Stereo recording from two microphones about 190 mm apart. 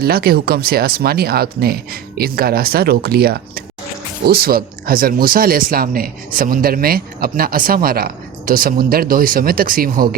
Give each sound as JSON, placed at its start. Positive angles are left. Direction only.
{"t": 0.0, "sound": "speech", "side_deg": -55}